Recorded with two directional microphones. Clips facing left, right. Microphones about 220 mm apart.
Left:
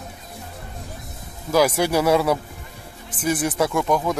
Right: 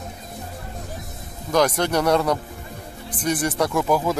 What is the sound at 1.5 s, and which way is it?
Speech, 5° left (ahead or behind).